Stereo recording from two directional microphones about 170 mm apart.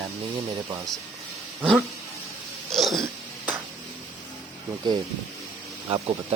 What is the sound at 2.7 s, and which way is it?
Cat, centre (ahead or behind).